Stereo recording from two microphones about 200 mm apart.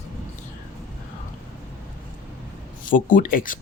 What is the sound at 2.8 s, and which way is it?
Speech, 40° left (ahead or behind).